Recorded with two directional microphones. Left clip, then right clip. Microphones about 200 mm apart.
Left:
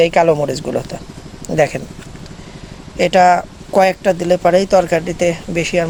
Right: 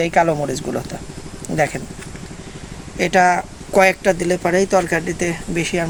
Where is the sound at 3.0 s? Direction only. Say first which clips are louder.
Left 4 dB; 50° left (ahead or behind).